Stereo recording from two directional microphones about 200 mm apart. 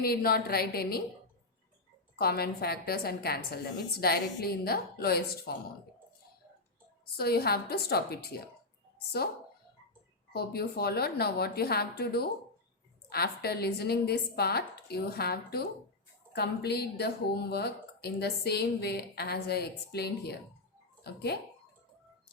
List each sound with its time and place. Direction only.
0.0 s a woman's voice: 50° left (ahead or behind)
2.1 s a woman's voice: 50° left (ahead or behind)
7.2 s a woman's voice: 50° left (ahead or behind)
10.3 s a woman's voice: 50° left (ahead or behind)